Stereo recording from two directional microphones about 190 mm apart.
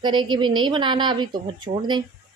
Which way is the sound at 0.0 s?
25° right (ahead or behind).